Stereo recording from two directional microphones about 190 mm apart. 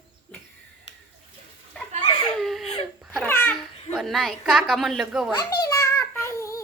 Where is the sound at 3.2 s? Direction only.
10° left (ahead or behind).